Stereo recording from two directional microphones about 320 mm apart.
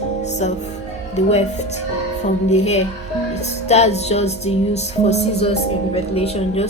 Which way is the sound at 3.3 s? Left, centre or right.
Centre.